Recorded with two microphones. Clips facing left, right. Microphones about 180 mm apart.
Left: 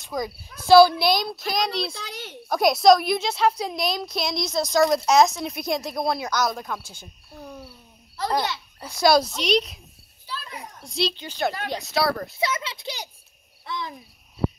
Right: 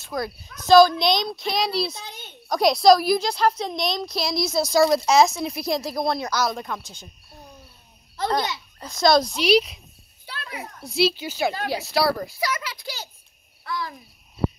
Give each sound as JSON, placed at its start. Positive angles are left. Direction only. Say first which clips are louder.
{"t": 0.0, "sound": "a woman's voice", "louder": "even", "side_deg": 10}
{"t": 2.0, "sound": "a sound", "louder": "left 4 dB", "side_deg": 90}
{"t": 2.4, "sound": "a woman's voice", "louder": "even", "side_deg": 0}
{"t": 8.7, "sound": "speech", "louder": "even", "side_deg": 10}
{"t": 9.4, "sound": "a woman's voice", "louder": "right 4 dB", "side_deg": -5}
{"t": 10.2, "sound": "children playing", "louder": "right 1 dB", "side_deg": -70}
{"t": 11.0, "sound": "a woman's voice", "louder": "right 4 dB", "side_deg": -5}
{"t": 12.4, "sound": "a child's voice", "louder": "left 1 dB", "side_deg": 25}
{"t": 13.7, "sound": "cricket", "louder": "right 2 dB", "side_deg": 20}